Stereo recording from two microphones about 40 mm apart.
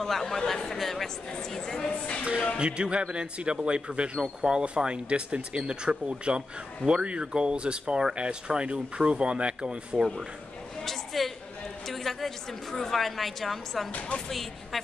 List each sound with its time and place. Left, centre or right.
0.0 s speech: centre
1.9 s speech: left
2.6 s speech: right
10.8 s a sound: centre
12.7 s a woman's voice: centre